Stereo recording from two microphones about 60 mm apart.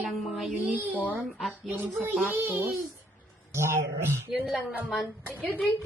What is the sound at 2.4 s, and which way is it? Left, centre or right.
A child's voice, right.